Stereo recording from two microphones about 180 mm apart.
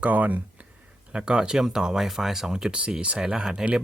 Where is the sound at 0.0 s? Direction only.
10° right (ahead or behind).